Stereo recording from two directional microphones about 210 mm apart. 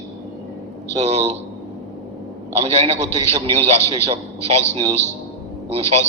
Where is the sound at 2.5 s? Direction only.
30° right (ahead or behind).